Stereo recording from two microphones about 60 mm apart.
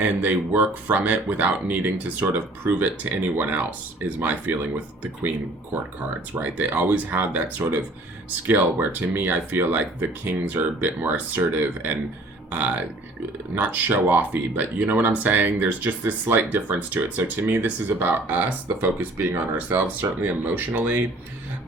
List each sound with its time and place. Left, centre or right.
0.0 s speech: right
6.3 s speech: right